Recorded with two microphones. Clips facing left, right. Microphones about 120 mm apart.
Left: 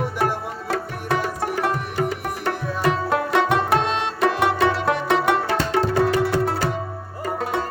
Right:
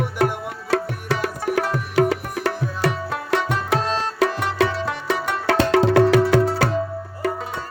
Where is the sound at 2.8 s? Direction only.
65° left (ahead or behind).